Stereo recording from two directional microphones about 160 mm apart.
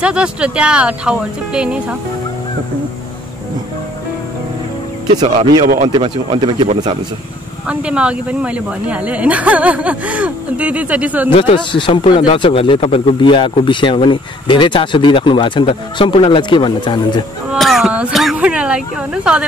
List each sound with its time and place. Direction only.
0.0 s speech: 5° right (ahead or behind)
5.2 s speech: 30° right (ahead or behind)
7.6 s speech: 5° right (ahead or behind)
11.3 s speech: 35° left (ahead or behind)
17.5 s a sound: centre (ahead or behind)
19.3 s speech: 5° right (ahead or behind)